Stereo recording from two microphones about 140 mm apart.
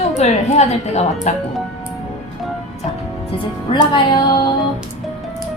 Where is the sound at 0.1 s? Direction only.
50° left (ahead or behind).